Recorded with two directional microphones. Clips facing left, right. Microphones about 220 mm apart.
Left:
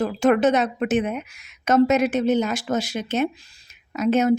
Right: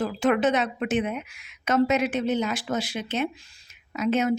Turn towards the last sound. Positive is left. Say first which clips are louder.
# left 5 dB
turn(degrees=45)  # may be behind; listen again after turning